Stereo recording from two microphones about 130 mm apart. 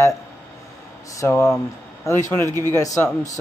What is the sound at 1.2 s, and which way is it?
Speech, 20° left (ahead or behind).